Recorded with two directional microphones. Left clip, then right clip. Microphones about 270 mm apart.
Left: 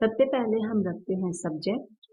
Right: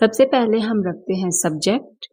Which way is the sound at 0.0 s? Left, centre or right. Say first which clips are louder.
Right 9 dB; right.